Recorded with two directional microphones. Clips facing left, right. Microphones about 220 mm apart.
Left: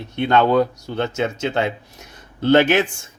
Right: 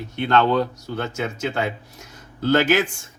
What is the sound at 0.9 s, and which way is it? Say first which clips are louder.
Speech: left 5 dB; 25° left (ahead or behind).